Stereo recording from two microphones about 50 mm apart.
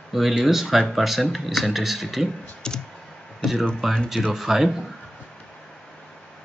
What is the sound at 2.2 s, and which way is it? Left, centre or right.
Speech, centre.